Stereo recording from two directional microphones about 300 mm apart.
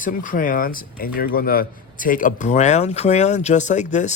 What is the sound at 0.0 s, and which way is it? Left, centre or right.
Speech, left.